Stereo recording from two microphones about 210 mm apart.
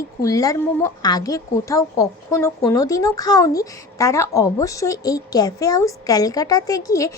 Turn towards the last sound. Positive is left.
turn(degrees=15)  # may be behind; listen again after turning